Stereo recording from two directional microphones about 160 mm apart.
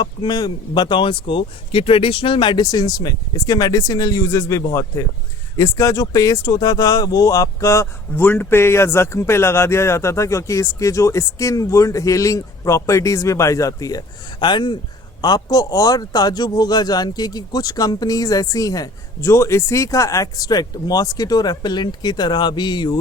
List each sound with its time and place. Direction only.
0.0 s speech: 25° left (ahead or behind)